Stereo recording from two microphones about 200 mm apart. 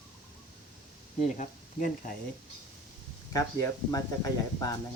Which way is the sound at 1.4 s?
40° left (ahead or behind).